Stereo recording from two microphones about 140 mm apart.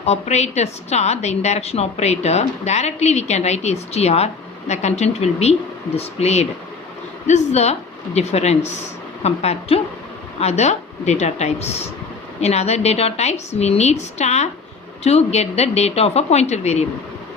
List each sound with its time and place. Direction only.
0.0 s a woman's voice: 50° left (ahead or behind)